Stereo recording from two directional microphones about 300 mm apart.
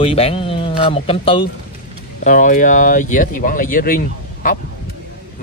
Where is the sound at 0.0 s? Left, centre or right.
Centre.